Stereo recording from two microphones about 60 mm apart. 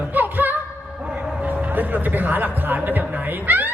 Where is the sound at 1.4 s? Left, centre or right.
Right.